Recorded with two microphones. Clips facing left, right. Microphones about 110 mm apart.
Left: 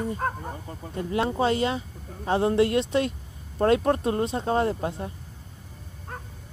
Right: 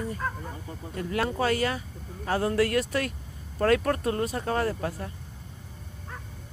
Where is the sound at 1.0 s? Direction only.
25° left (ahead or behind).